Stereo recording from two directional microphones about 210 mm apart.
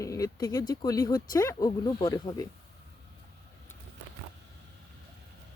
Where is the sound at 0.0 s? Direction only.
15° left (ahead or behind).